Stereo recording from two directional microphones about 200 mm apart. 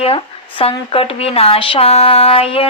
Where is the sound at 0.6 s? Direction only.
30° left (ahead or behind).